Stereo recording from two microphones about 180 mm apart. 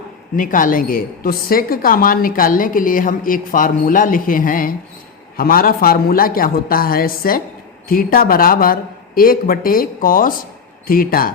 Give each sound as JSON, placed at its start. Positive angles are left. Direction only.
{"t": 0.3, "sound": "a woman's voice", "side_deg": 50}